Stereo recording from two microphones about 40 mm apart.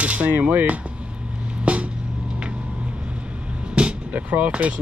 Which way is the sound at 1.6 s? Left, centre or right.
Right.